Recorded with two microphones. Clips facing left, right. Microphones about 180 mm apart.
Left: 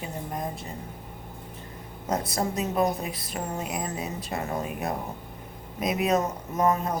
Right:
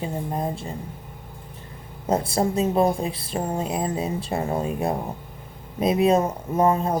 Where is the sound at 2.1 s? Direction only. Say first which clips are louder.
Right 6 dB; 30° right (ahead or behind).